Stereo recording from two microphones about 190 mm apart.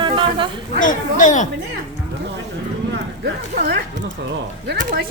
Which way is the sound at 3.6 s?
55° right (ahead or behind).